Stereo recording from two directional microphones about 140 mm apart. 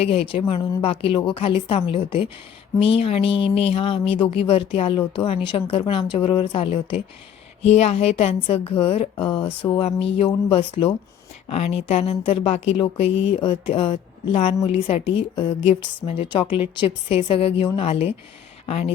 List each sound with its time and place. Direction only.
0.0 s a woman's voice: 45° left (ahead or behind)